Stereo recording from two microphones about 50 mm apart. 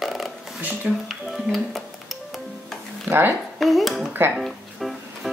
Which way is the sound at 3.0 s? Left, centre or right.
Right.